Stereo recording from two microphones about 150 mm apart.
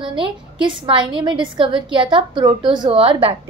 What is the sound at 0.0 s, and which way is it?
A woman's voice, 35° right (ahead or behind).